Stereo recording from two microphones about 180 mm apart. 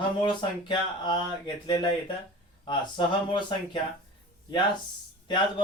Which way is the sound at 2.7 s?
25° left (ahead or behind).